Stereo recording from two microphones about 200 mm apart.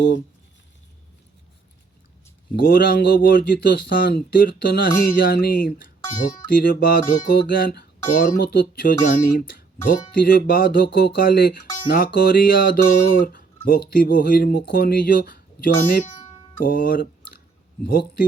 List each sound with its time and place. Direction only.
2.6 s speech: 45° left (ahead or behind)